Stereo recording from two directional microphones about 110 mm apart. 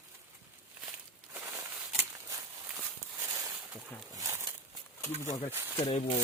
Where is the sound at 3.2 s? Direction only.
30° right (ahead or behind).